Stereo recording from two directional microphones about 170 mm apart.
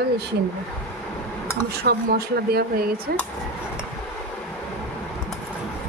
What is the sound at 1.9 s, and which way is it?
Speech, 65° right (ahead or behind).